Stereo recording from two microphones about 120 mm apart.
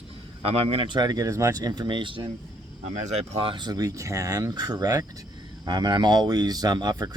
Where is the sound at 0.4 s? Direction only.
50° right (ahead or behind).